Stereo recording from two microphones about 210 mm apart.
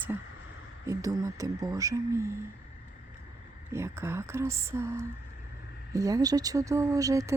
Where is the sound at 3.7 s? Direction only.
10° right (ahead or behind).